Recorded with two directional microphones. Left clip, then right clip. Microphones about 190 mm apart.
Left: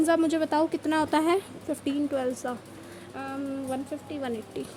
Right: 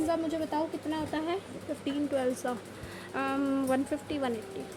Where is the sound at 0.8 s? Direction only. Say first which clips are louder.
Left 9 dB; 40° left (ahead or behind).